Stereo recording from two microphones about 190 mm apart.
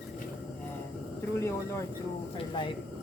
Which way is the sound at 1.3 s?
15° left (ahead or behind).